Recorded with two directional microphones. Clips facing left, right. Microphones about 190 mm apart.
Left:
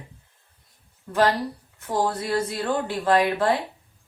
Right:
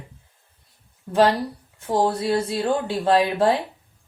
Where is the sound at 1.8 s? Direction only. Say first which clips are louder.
Right 4 dB; 25° right (ahead or behind).